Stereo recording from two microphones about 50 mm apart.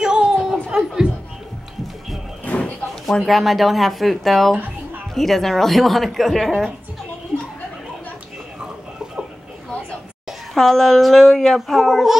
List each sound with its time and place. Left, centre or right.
0.0 s a sound: centre
2.4 s music: left
3.3 s a child's voice: centre
10.5 s a child's voice: centre